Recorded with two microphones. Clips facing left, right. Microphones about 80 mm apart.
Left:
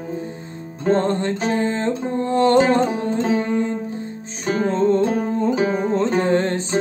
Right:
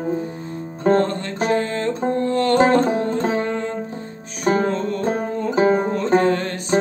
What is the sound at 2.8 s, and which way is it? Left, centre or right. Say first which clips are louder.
Music: right 1 dB; right.